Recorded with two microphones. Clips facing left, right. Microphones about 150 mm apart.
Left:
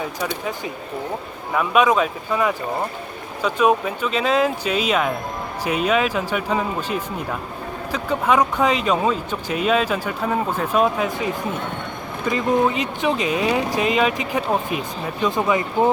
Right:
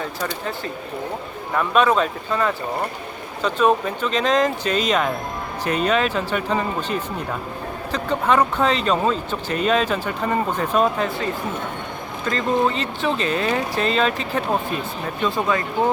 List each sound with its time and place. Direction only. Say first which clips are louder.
0.0 s speech: left 1 dB; 10° left (ahead or behind)